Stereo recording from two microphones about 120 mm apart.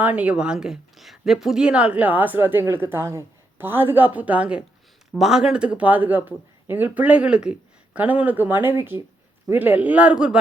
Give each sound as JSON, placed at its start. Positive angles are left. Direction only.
{"t": 0.0, "sound": "speech", "side_deg": -10}